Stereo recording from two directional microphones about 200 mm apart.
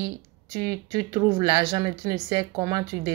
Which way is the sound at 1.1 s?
20° right (ahead or behind).